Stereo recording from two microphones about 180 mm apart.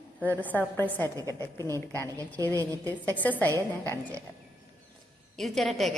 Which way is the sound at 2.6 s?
20° right (ahead or behind).